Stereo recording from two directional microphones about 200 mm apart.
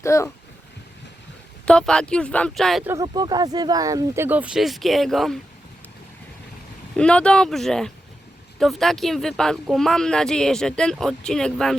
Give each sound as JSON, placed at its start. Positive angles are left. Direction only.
{"t": 0.0, "sound": "speech", "side_deg": 15}
{"t": 1.6, "sound": "speech", "side_deg": 5}
{"t": 2.8, "sound": "speech", "side_deg": -15}
{"t": 6.9, "sound": "speech", "side_deg": 5}